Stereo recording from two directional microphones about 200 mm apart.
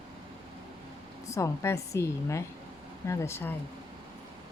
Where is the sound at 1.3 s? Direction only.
15° left (ahead or behind).